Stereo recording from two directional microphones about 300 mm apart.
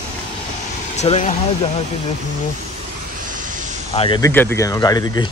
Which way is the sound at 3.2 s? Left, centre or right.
Right.